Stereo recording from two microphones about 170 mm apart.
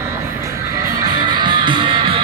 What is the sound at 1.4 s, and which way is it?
Music, 30° right (ahead or behind).